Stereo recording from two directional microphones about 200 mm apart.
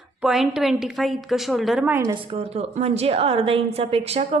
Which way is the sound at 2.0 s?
25° right (ahead or behind).